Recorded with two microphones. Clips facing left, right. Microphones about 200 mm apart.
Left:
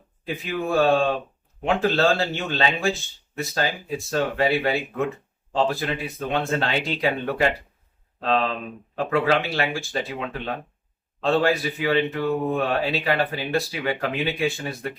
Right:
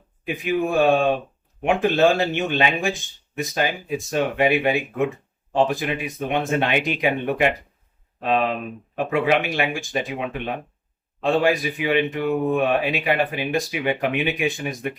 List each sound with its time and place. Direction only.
0.3 s speech: 15° right (ahead or behind)